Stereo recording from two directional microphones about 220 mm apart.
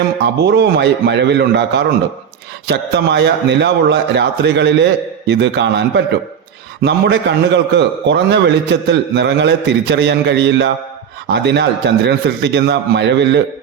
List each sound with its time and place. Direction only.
0.4 s a man's voice: 50° right (ahead or behind)